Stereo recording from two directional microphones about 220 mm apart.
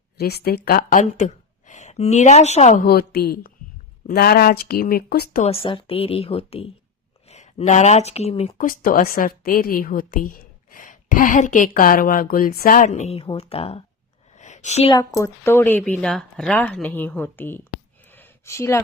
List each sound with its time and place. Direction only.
0.2 s a woman's voice: 45° left (ahead or behind)
5.4 s a woman's voice: 25° left (ahead or behind)
8.6 s a woman's voice: 40° left (ahead or behind)
14.3 s a sound: 35° left (ahead or behind)
14.9 s speech: 15° left (ahead or behind)
18.0 s a sound: 10° left (ahead or behind)